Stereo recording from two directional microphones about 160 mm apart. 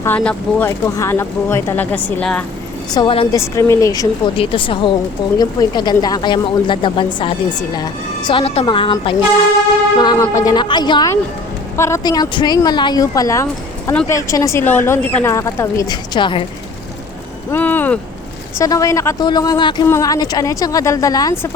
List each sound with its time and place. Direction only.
0.0 s a woman's voice: 10° left (ahead or behind)
2.9 s speech: 30° left (ahead or behind)
3.3 s speech: 20° left (ahead or behind)
4.4 s a woman's voice: 35° left (ahead or behind)
10.2 s speech: 20° left (ahead or behind)
17.5 s a sound: 10° left (ahead or behind)
18.6 s speech: 20° left (ahead or behind)